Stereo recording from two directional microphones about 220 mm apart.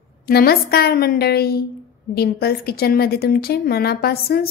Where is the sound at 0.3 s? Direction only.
45° left (ahead or behind).